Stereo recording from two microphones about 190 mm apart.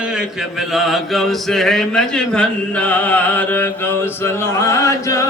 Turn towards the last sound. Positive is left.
turn(degrees=15)  # may be behind; listen again after turning